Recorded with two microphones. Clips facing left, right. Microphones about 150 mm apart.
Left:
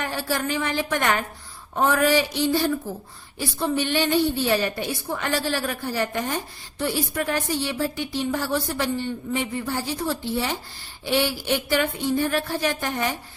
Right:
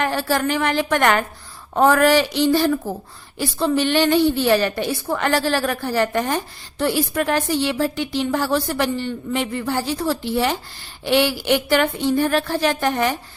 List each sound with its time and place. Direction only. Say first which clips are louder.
0.0 s a woman's voice: right 6 dB; 90° right